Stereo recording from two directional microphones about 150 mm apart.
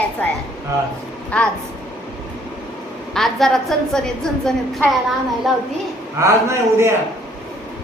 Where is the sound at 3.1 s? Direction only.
Centre (ahead or behind).